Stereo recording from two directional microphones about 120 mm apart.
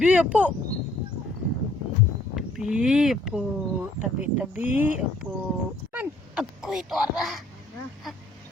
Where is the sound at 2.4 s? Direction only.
5° right (ahead or behind).